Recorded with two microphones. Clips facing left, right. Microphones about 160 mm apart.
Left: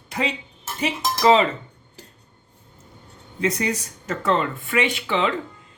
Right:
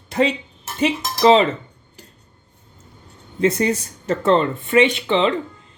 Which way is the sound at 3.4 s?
30° right (ahead or behind).